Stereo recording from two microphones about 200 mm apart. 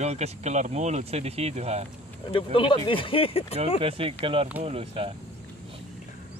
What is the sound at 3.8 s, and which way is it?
Speech, 30° right (ahead or behind).